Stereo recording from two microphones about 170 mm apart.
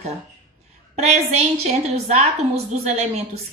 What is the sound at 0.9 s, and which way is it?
A woman's voice, 40° right (ahead or behind).